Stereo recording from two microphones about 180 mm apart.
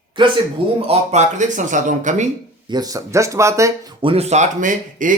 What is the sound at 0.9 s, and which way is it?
Speech, 40° right (ahead or behind).